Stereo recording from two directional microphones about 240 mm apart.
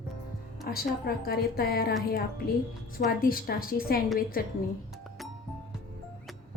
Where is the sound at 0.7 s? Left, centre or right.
Left.